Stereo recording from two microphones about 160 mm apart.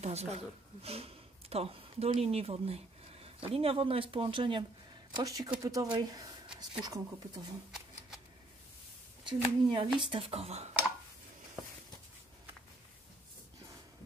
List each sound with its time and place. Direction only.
0.0 s speech: 40° right (ahead or behind); by 7.5 s 25° right (ahead or behind)
9.2 s speech: 35° right (ahead or behind)